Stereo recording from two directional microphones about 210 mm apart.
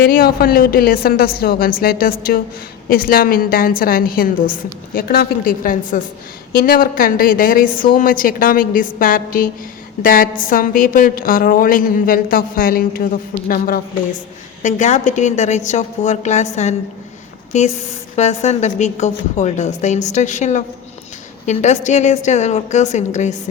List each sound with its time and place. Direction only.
0.0 s a woman's voice: 45° left (ahead or behind)